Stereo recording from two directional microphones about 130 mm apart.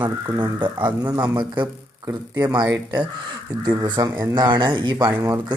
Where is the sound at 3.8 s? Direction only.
35° right (ahead or behind).